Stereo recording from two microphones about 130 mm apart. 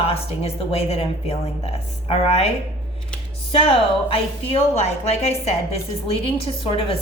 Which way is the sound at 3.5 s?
45° left (ahead or behind).